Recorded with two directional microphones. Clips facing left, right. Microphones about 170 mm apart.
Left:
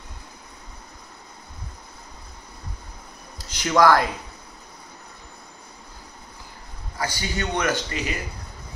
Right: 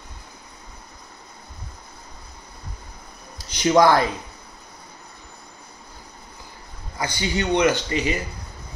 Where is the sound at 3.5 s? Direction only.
20° right (ahead or behind).